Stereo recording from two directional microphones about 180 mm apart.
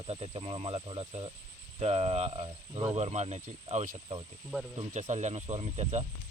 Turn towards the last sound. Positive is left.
turn(degrees=-35)  # may be behind; listen again after turning